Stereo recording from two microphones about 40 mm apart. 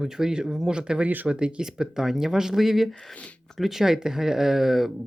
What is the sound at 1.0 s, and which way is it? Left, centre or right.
Speech, right.